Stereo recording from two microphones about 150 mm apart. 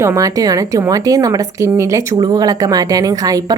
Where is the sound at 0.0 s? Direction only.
20° right (ahead or behind).